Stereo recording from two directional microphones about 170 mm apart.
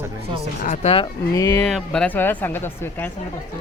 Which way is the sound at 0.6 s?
35° left (ahead or behind).